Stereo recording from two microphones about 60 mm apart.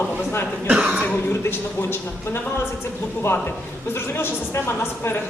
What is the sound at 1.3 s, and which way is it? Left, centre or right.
A man's voice, left.